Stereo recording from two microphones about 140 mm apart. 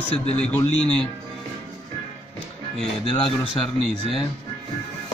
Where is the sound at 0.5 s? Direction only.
5° left (ahead or behind).